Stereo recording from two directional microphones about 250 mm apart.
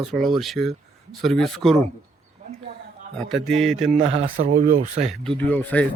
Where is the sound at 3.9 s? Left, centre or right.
Right.